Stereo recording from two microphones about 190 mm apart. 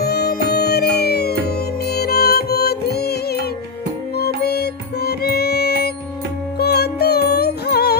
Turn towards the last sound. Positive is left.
turn(degrees=55)  # may be behind; listen again after turning